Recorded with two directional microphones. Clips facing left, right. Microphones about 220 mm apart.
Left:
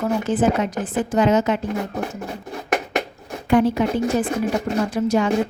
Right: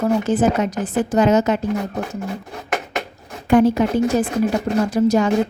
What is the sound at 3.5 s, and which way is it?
Speech, 45° right (ahead or behind).